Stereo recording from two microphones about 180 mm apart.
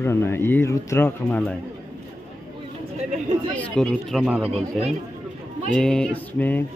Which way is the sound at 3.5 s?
5° left (ahead or behind).